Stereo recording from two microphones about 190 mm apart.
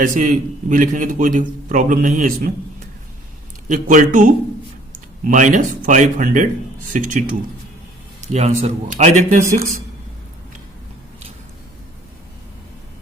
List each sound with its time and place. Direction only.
0.0 s a man's voice: 40° right (ahead or behind)
3.7 s a man's voice: 45° right (ahead or behind)
8.3 s speech: 35° right (ahead or behind)